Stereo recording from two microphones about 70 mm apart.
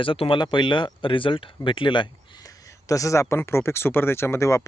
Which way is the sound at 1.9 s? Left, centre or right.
Left.